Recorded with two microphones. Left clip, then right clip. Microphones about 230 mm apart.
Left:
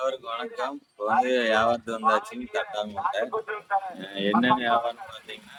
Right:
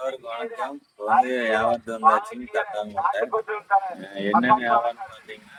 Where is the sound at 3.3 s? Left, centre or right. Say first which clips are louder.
Right 5 dB; right.